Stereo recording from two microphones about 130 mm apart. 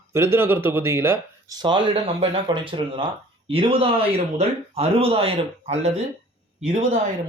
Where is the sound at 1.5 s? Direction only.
40° right (ahead or behind).